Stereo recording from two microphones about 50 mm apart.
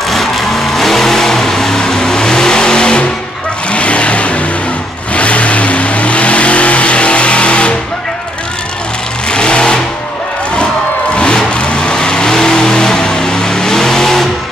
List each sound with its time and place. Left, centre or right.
0.1 s vehicle: centre; by 7.7 s left
9.3 s vehicle: centre
11.1 s vehicle: left